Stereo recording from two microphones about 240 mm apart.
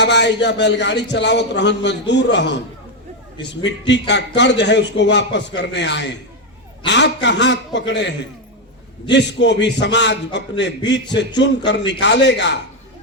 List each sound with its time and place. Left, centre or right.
0.0 s a man's voice: left
3.7 s a man's voice: left